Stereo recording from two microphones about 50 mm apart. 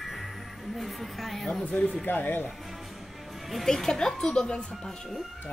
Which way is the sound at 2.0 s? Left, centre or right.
Left.